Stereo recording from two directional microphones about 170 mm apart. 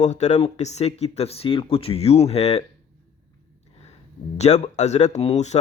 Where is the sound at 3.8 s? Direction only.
40° left (ahead or behind).